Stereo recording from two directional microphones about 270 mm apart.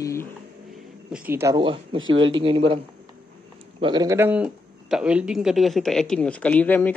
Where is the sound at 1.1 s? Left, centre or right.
Centre.